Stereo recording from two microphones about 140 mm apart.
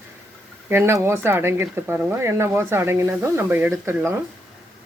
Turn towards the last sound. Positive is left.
turn(degrees=-20)  # may be behind; listen again after turning